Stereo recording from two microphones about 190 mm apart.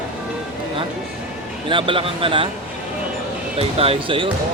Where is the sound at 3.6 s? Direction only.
30° right (ahead or behind).